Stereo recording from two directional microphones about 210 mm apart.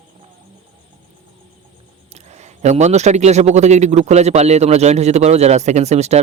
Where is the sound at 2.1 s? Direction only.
30° right (ahead or behind).